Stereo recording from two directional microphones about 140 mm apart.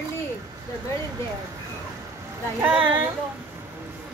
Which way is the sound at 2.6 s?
10° right (ahead or behind).